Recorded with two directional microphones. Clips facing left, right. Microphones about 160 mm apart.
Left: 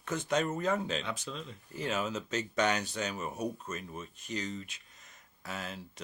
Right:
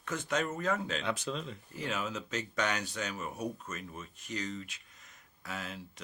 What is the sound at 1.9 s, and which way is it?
Speech, 25° left (ahead or behind).